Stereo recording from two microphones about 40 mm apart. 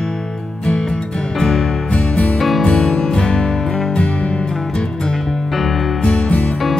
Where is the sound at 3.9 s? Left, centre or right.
Left.